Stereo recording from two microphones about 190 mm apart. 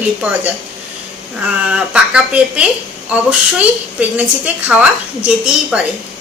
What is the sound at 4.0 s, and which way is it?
A woman's voice, 5° right (ahead or behind).